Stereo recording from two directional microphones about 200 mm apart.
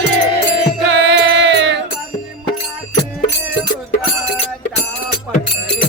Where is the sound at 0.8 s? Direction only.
60° right (ahead or behind).